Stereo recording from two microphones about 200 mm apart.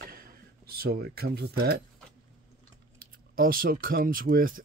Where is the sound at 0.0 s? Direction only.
45° right (ahead or behind).